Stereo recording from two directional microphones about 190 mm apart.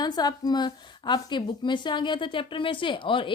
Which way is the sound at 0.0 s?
20° left (ahead or behind).